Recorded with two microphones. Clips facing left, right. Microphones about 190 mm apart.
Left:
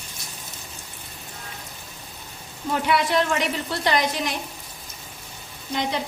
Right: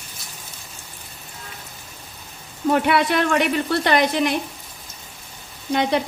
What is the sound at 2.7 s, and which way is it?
A woman's voice, 60° right (ahead or behind).